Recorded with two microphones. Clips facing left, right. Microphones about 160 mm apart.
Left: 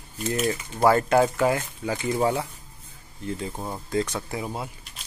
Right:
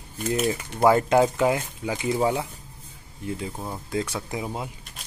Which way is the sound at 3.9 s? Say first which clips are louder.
Left 2 dB; 5° right (ahead or behind).